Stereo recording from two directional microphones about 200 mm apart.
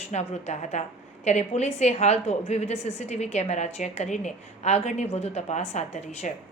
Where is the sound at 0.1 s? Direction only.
35° left (ahead or behind).